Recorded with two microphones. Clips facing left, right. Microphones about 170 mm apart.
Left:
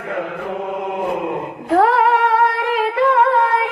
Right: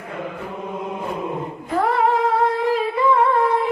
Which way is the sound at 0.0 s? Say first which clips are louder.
Left 6 dB; 70° left (ahead or behind).